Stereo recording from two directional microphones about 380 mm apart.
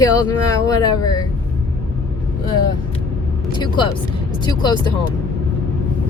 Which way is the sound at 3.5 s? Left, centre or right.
Centre.